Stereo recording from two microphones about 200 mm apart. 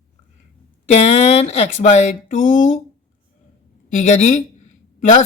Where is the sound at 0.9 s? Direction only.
35° left (ahead or behind).